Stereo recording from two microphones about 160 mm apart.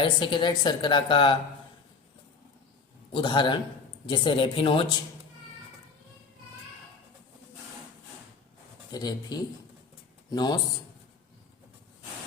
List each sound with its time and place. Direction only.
0.0 s a woman's voice: 30° left (ahead or behind)
3.1 s a woman's voice: 30° left (ahead or behind)
8.9 s speech: 25° left (ahead or behind)